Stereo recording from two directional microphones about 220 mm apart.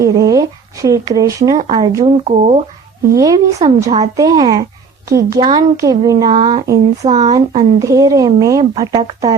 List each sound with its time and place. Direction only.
0.0 s speech: 15° right (ahead or behind)
1.6 s speech: 30° right (ahead or behind)
1.9 s speech: 15° right (ahead or behind)
2.1 s speech: 30° right (ahead or behind)
3.2 s speech: 15° right (ahead or behind)